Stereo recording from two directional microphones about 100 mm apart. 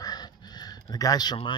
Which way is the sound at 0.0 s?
45° left (ahead or behind).